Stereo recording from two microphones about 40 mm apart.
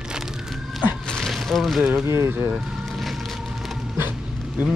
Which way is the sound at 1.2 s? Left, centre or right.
Centre.